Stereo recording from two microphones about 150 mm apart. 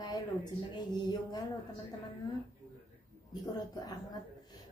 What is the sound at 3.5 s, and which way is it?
Speech, 25° left (ahead or behind).